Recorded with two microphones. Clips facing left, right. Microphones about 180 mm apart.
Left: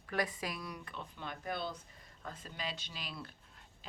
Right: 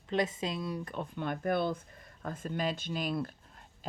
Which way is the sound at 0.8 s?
50° right (ahead or behind).